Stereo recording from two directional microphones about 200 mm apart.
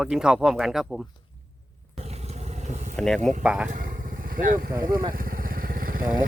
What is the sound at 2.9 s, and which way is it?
Speech, centre (ahead or behind).